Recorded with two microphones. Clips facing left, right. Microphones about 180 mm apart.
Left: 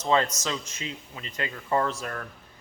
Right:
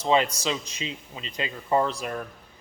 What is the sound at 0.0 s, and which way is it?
A man's voice, 15° right (ahead or behind).